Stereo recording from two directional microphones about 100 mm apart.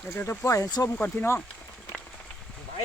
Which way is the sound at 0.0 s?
25° left (ahead or behind).